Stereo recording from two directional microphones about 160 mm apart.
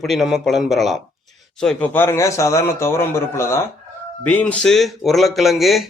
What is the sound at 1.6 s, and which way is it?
A man's voice, 10° left (ahead or behind).